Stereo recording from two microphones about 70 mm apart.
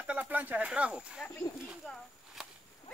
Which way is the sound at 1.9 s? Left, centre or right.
Centre.